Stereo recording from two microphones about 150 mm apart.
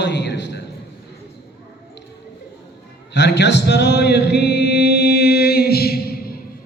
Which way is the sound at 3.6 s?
90° left.